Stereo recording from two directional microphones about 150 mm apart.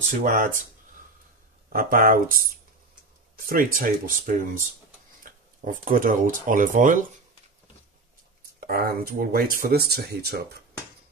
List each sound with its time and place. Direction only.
0.1 s speech: 65° right (ahead or behind)
1.7 s speech: 70° right (ahead or behind)
3.4 s speech: 70° right (ahead or behind)
8.6 s speech: 85° right